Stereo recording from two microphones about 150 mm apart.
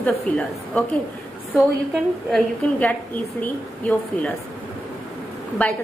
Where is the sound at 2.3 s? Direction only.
10° left (ahead or behind).